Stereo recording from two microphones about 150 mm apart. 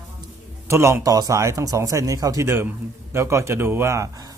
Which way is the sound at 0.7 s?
20° right (ahead or behind).